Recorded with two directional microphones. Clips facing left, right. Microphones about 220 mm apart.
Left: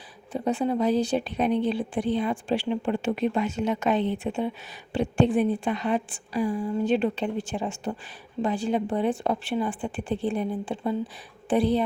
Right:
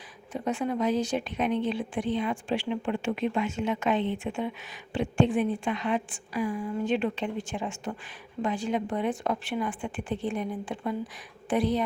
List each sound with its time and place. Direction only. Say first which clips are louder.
0.3 s speech: left 4 dB; 30° left (ahead or behind)